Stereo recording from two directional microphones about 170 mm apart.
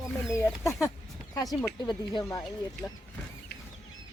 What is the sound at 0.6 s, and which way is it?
Speech, 15° left (ahead or behind).